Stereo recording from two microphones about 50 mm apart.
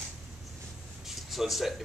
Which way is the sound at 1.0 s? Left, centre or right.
Centre.